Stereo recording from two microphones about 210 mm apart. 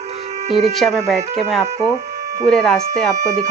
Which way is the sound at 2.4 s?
5° left (ahead or behind).